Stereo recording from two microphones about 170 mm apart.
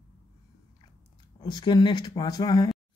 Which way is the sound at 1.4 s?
25° left (ahead or behind).